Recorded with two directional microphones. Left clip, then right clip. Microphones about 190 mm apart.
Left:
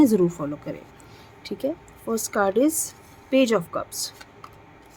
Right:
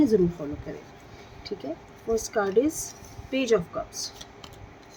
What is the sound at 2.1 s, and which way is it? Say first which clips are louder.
A woman's voice: left 1 dB; 55° left (ahead or behind).